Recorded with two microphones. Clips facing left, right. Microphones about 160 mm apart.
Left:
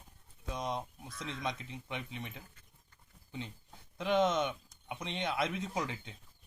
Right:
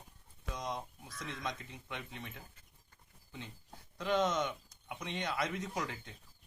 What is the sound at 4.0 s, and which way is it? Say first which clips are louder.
Speech: left 3 dB; 20° left (ahead or behind).